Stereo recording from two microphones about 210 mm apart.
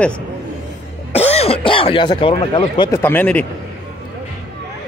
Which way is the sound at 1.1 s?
30° left (ahead or behind).